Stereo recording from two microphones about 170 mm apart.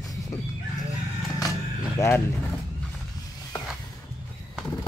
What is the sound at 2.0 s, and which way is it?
Speech, 15° left (ahead or behind).